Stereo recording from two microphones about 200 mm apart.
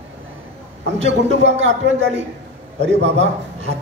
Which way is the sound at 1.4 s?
65° right (ahead or behind).